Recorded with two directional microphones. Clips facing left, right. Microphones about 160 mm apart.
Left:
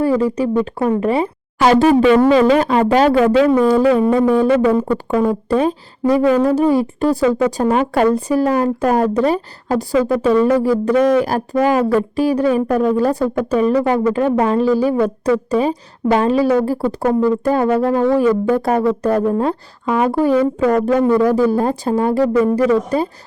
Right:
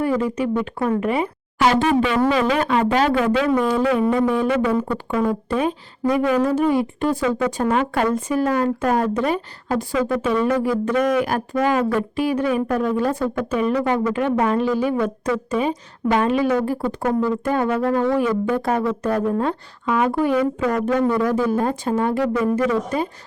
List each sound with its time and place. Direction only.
0.0 s speech: 35° left (ahead or behind)